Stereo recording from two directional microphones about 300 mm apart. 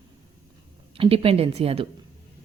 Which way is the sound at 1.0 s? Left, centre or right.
Centre.